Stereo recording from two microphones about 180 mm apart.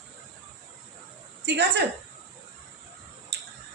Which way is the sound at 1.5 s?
70° right (ahead or behind).